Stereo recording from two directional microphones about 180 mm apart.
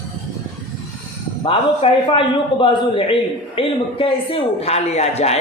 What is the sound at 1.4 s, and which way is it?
A man's voice, 30° left (ahead or behind).